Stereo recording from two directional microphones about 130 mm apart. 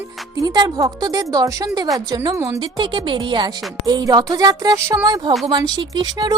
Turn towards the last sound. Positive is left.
turn(degrees=-35)  # may be behind; listen again after turning